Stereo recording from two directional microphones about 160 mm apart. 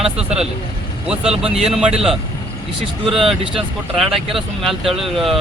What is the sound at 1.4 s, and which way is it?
Speech, 5° right (ahead or behind).